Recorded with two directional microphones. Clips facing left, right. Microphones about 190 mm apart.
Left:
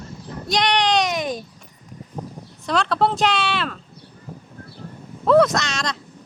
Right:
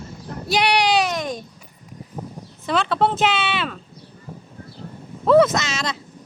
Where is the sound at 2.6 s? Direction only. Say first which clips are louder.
Even; centre (ahead or behind).